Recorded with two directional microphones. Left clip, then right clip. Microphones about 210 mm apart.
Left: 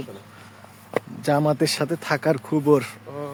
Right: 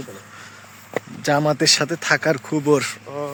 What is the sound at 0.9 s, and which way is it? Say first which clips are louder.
Speech: right 2 dB; centre (ahead or behind).